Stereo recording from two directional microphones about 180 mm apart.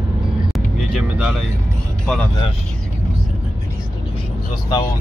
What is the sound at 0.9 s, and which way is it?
Vehicle, 5° right (ahead or behind).